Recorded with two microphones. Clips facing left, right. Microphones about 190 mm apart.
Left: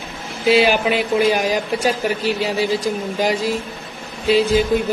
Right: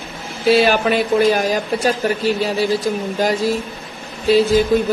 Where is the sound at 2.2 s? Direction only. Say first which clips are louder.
Right 2 dB; 45° right (ahead or behind).